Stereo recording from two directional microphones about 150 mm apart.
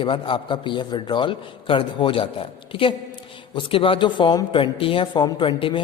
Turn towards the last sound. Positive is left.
turn(degrees=35)  # may be behind; listen again after turning